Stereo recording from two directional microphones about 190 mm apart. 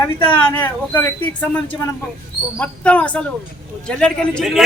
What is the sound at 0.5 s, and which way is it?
A man's voice, 10° left (ahead or behind).